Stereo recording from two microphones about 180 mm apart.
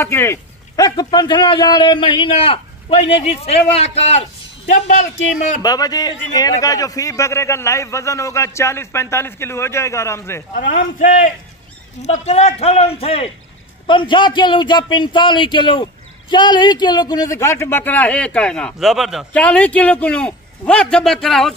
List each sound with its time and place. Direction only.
0.0 s a man's voice: 15° left (ahead or behind); by 5.1 s 45° left (ahead or behind)
5.6 s a man's voice: 20° left (ahead or behind)
10.5 s a man's voice: 45° left (ahead or behind); by 21.5 s centre (ahead or behind)